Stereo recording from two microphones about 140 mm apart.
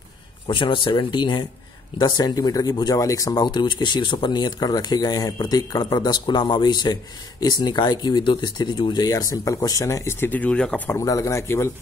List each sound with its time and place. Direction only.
0.5 s speech: 35° left (ahead or behind); by 11.0 s 5° left (ahead or behind)
11.0 s speech: 20° left (ahead or behind)